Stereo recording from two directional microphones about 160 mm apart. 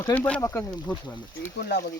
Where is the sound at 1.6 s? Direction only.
90° left.